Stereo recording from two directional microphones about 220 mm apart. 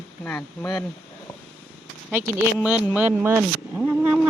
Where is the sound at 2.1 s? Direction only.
10° right (ahead or behind).